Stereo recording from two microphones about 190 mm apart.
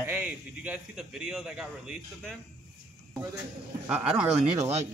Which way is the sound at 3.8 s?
5° right (ahead or behind).